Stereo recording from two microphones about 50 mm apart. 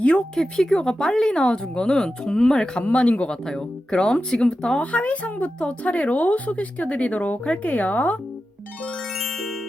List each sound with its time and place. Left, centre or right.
0.0 s speech: left
0.3 s speech: centre
2.8 s speech: left
3.4 s speech: centre
4.8 s speech: left
9.1 s music: centre